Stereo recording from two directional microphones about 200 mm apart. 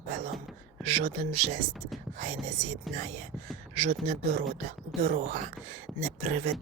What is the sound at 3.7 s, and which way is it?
Speech, 30° right (ahead or behind).